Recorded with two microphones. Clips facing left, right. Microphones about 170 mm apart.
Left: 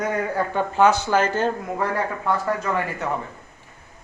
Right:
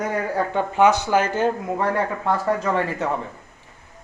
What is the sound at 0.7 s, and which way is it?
Speech, 15° right (ahead or behind).